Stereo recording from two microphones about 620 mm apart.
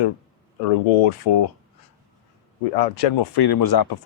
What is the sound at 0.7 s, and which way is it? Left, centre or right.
Speech, left.